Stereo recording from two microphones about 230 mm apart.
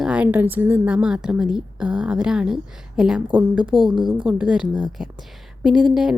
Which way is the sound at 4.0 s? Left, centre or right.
Centre.